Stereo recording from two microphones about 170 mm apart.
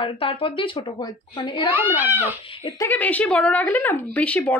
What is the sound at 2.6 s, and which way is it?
Speech, 15° left (ahead or behind).